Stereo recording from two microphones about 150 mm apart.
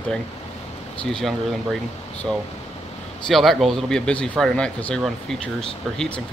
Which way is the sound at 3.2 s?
Centre (ahead or behind).